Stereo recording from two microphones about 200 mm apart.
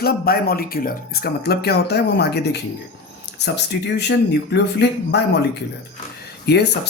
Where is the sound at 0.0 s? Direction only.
50° left (ahead or behind).